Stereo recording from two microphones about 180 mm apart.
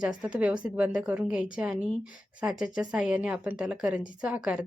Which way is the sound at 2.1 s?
50° left (ahead or behind).